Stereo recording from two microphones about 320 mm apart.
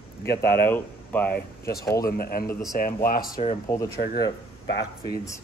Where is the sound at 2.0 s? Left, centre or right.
Left.